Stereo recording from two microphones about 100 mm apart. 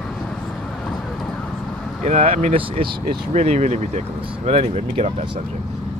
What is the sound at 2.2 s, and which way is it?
Speech, 75° right (ahead or behind).